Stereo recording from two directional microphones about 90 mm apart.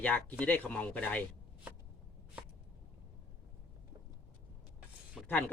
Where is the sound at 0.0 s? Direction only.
15° left (ahead or behind).